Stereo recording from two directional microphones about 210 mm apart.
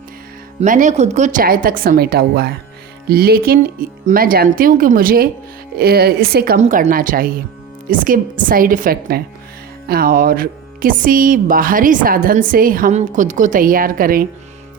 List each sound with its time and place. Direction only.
0.6 s speech: 35° right (ahead or behind)
6.6 s speech: 35° right (ahead or behind)